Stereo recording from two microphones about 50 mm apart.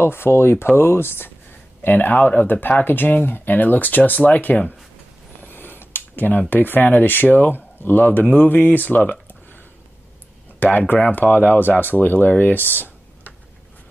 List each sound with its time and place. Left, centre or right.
0.0 s speech: left
5.4 s a sound: left
6.5 s speech: left
10.6 s speech: left